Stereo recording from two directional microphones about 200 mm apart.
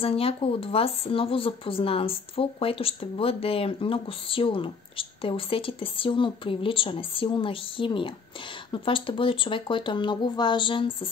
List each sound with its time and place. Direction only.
0.0 s speech: 30° left (ahead or behind)